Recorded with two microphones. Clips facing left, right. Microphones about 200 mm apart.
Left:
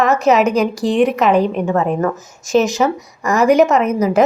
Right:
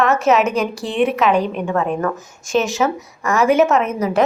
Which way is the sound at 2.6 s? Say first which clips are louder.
Left 2 dB; centre (ahead or behind).